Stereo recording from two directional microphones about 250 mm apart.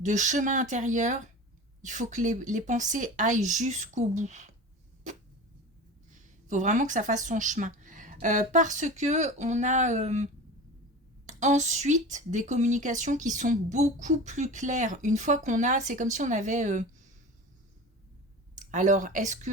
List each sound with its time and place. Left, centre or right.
0.0 s a woman's voice: right
6.5 s a woman's voice: right
11.3 s a woman's voice: right
18.5 s speech: right